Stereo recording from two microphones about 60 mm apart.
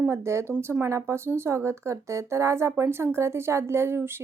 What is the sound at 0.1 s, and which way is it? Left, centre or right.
Speech, right.